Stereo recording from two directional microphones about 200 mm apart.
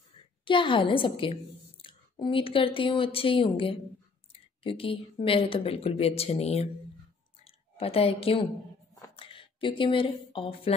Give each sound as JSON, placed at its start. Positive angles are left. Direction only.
{"t": 0.5, "sound": "a woman's voice", "side_deg": 25}